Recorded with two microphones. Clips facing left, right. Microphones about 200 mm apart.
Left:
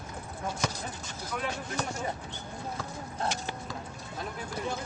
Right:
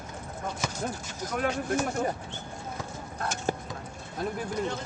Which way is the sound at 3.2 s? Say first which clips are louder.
Right 4 dB; 45° right (ahead or behind).